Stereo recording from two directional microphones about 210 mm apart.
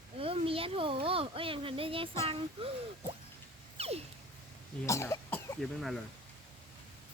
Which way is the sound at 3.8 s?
30° right (ahead or behind).